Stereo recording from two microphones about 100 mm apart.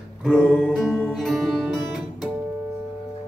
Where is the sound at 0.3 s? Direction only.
15° left (ahead or behind).